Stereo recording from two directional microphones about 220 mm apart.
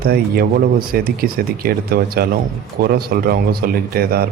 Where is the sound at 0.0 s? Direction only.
45° right (ahead or behind).